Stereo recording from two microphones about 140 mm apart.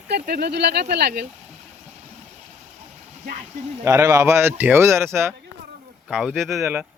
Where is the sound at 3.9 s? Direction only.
20° right (ahead or behind).